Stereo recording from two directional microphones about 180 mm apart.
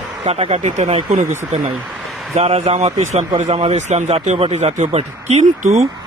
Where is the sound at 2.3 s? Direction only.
35° right (ahead or behind).